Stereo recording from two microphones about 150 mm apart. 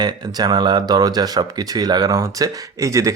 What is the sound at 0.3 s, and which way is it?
Speech, 25° right (ahead or behind).